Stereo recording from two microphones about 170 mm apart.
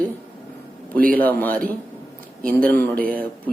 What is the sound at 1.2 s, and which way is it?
Speech, 10° left (ahead or behind).